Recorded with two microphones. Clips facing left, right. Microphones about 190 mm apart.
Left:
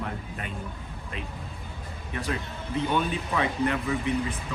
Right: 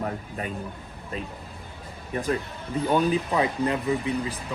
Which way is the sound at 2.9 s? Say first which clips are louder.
Right 7 dB; 35° right (ahead or behind).